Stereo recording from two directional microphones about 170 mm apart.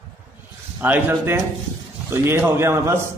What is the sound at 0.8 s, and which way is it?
A man's voice, 10° right (ahead or behind).